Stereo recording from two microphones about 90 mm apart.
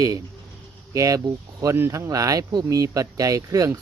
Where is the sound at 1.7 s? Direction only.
30° right (ahead or behind).